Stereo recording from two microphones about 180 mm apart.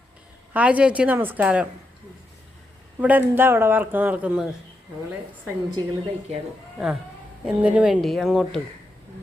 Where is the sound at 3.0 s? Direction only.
10° right (ahead or behind).